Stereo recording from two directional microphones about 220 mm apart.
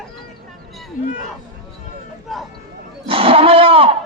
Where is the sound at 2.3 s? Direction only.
Centre (ahead or behind).